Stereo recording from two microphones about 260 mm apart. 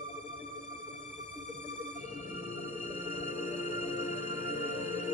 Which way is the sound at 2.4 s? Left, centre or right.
Left.